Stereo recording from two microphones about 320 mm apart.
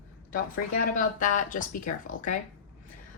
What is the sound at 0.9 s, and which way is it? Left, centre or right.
Speech, left.